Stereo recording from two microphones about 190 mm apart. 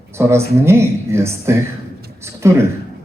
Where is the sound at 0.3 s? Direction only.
15° right (ahead or behind).